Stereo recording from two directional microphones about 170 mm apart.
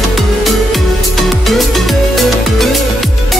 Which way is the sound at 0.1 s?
Centre (ahead or behind).